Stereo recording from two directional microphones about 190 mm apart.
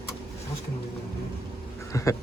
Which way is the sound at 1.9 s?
15° left (ahead or behind).